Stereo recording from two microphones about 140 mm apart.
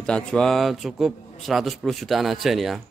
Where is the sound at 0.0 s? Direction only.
5° left (ahead or behind).